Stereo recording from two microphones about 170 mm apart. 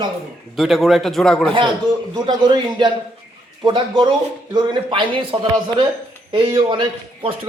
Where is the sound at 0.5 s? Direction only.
Centre (ahead or behind).